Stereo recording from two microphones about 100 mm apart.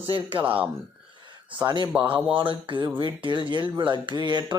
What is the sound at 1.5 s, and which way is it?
Speech, 50° right (ahead or behind).